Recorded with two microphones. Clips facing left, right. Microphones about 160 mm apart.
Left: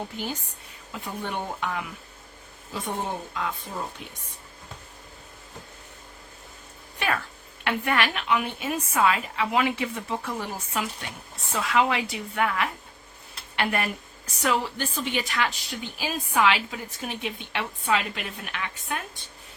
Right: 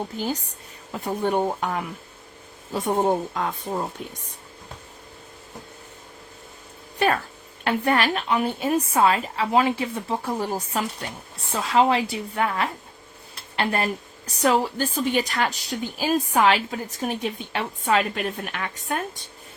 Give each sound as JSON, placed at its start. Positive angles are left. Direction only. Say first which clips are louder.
{"t": 0.2, "sound": "a woman's voice", "louder": "right 5 dB", "side_deg": -40}
{"t": 7.6, "sound": "a woman's voice", "louder": "right 4 dB", "side_deg": -35}